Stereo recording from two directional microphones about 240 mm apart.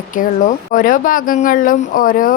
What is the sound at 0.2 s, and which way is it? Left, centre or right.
Speech, left.